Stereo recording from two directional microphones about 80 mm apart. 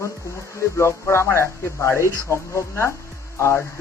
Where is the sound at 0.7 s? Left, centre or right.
Left.